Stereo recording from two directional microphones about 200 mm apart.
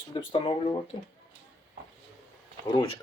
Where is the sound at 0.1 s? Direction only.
25° left (ahead or behind).